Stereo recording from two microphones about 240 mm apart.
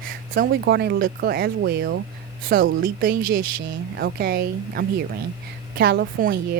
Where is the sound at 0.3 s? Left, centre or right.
Right.